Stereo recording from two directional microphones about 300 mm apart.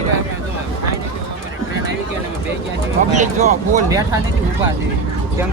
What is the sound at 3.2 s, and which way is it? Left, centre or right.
Speech, right.